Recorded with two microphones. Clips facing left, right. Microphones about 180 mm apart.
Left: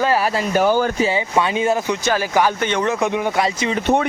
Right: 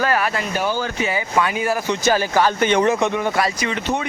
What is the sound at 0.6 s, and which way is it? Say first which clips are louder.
Speech: left 8 dB; 50° left (ahead or behind).